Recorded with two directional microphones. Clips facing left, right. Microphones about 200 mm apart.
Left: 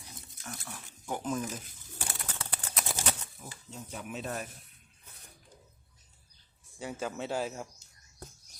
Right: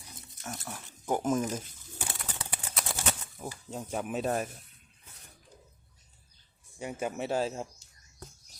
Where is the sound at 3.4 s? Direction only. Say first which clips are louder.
Right 7 dB; 50° right (ahead or behind).